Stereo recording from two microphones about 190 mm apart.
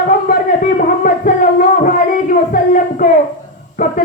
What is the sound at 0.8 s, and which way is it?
Music, 45° left (ahead or behind).